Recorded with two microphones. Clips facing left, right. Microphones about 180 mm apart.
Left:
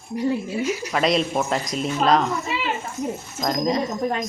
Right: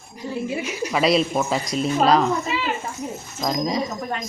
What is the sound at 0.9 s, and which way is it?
Speech, 5° right (ahead or behind).